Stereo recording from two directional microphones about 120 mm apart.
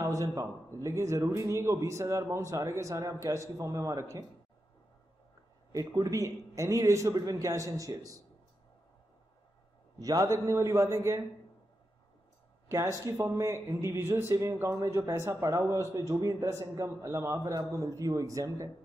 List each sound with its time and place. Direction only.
0.0 s speech: 25° right (ahead or behind)
5.7 s speech: 30° right (ahead or behind)
9.9 s speech: 30° right (ahead or behind)
12.6 s speech: 25° right (ahead or behind)